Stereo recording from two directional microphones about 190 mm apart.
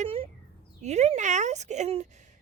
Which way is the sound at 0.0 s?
30° right (ahead or behind).